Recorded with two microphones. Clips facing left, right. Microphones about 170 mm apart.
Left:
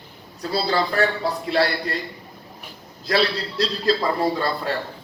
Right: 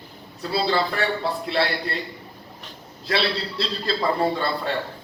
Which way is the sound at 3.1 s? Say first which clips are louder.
Left 3 dB; 40° left (ahead or behind).